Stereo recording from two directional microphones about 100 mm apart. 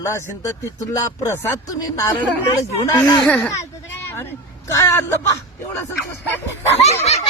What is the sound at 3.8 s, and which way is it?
Hubbub, 20° left (ahead or behind).